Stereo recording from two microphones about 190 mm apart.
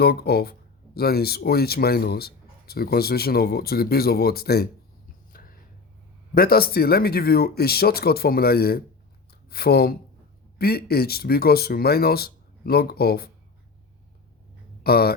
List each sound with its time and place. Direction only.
0.0 s speech: 55° left (ahead or behind)
5.3 s a sound: 50° left (ahead or behind)
6.3 s speech: 50° left (ahead or behind)
14.8 s speech: 55° left (ahead or behind)